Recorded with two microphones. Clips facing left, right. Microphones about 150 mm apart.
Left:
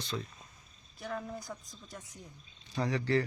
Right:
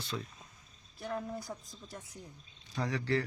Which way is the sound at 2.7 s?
Centre (ahead or behind).